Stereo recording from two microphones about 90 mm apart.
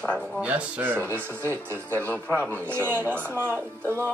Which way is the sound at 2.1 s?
15° left (ahead or behind).